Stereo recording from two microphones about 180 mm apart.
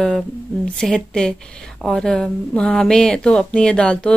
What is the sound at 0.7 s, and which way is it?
Speech, 5° left (ahead or behind).